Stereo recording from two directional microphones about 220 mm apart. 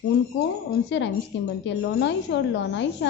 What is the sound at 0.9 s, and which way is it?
A woman's voice, 55° left (ahead or behind).